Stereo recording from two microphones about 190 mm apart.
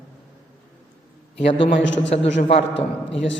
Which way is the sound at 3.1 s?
70° left (ahead or behind).